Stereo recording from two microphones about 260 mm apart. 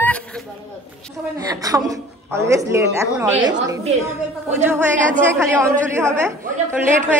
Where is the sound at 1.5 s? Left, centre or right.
Centre.